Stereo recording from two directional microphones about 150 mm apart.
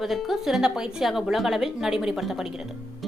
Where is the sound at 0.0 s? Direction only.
Centre (ahead or behind).